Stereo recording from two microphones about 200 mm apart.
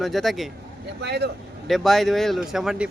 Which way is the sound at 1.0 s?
55° right (ahead or behind).